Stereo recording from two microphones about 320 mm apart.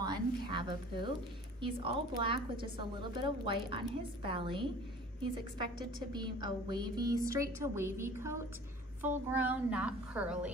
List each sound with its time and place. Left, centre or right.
0.0 s a sound: centre
1.6 s a woman's voice: centre
6.1 s a woman's voice: centre